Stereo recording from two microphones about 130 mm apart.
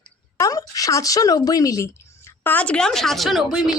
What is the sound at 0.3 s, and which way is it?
Speech, 25° left (ahead or behind).